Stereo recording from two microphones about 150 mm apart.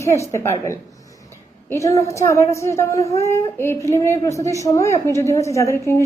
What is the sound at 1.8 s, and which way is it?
A woman's voice, 20° left (ahead or behind).